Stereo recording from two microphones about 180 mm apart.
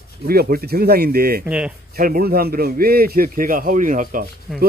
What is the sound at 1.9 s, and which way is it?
Speech, 55° right (ahead or behind).